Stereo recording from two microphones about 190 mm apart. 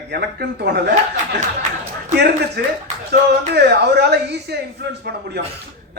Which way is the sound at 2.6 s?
60° right (ahead or behind).